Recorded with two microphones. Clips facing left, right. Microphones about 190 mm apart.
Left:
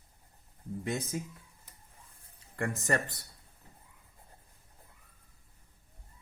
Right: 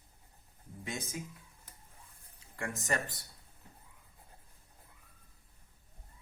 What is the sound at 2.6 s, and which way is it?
Speech, 60° left (ahead or behind).